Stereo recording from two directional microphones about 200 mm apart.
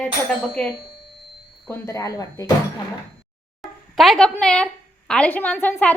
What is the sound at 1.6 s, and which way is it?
Speech, 15° left (ahead or behind).